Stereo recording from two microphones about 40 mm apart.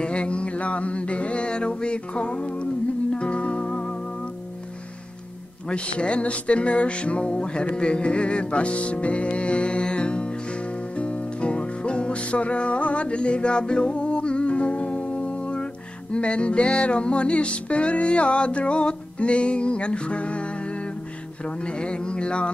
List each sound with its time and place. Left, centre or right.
0.0 s a sound: left
5.7 s music: left
21.5 s music: left